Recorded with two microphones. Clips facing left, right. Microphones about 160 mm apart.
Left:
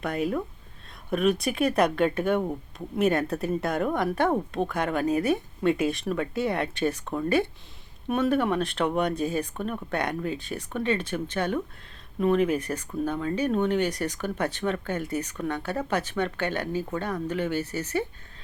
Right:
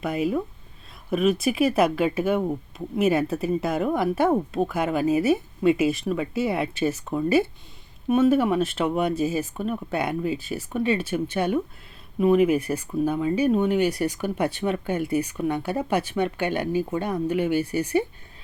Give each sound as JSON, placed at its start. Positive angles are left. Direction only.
{"t": 0.0, "sound": "speech", "side_deg": -5}